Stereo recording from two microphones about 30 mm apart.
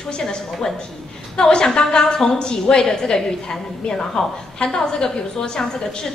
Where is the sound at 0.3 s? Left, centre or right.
Centre.